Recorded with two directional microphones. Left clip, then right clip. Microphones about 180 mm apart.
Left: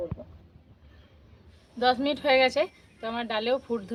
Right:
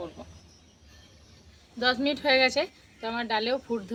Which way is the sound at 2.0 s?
45° left (ahead or behind).